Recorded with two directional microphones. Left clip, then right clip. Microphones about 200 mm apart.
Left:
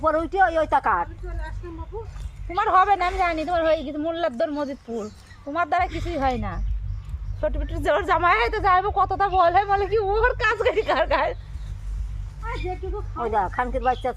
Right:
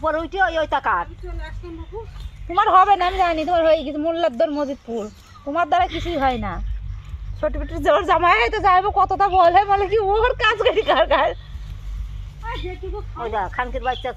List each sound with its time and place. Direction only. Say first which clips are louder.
0.0 s speech: even; 45° left (ahead or behind)
2.5 s a woman's voice: right 4 dB; 45° right (ahead or behind)
13.2 s speech: even; 45° left (ahead or behind)